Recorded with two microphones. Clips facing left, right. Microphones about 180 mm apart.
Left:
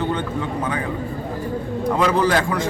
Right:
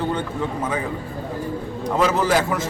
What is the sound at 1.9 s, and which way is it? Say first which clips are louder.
Speech: even; 5° right (ahead or behind).